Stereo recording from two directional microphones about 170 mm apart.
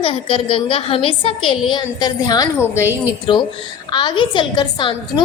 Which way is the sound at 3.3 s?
30° left (ahead or behind).